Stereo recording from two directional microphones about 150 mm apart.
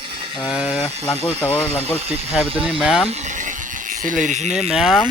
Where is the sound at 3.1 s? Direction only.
55° right (ahead or behind).